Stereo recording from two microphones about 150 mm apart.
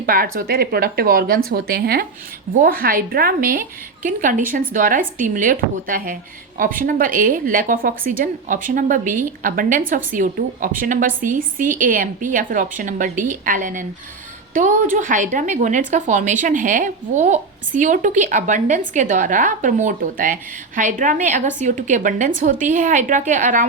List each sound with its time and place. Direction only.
0.0 s speech: 70° right (ahead or behind); by 2.0 s 90° right
2.6 s a woman's voice: 75° right (ahead or behind); by 23.6 s 60° right (ahead or behind)